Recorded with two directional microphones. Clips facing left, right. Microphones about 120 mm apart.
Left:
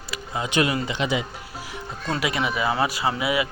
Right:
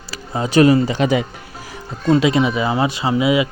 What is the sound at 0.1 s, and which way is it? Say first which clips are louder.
Speech: right 8 dB; 35° right (ahead or behind).